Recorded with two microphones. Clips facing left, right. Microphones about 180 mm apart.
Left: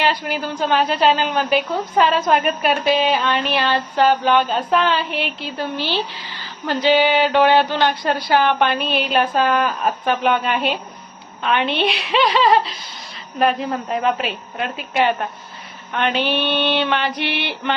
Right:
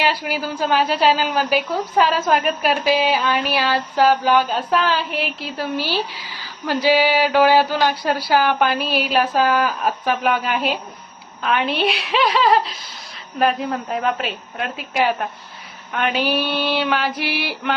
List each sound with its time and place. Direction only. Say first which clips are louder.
0.0 s a woman's voice: left 1 dB; 10° right (ahead or behind)